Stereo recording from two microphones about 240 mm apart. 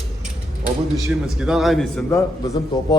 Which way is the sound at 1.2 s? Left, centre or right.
Centre.